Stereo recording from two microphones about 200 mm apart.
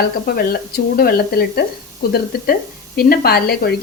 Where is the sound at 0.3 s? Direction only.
50° left (ahead or behind).